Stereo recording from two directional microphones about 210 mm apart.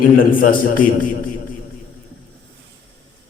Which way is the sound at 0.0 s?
40° left (ahead or behind).